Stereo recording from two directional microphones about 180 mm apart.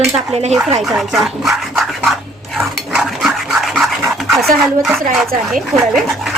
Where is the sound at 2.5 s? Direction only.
Centre (ahead or behind).